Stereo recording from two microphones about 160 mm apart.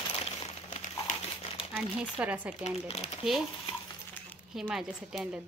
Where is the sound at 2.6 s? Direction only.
40° left (ahead or behind).